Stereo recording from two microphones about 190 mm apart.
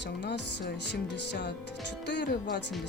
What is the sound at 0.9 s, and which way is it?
Speech, 65° left (ahead or behind).